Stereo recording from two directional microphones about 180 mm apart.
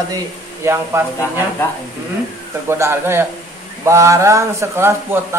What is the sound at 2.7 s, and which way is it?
Speech, 15° right (ahead or behind).